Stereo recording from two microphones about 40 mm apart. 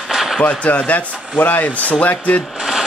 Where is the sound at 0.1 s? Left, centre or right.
Centre.